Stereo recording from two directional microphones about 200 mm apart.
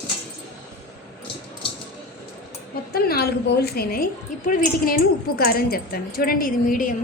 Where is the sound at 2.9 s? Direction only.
50° left (ahead or behind).